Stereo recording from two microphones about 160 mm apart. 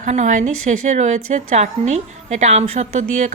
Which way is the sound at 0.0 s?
50° right (ahead or behind).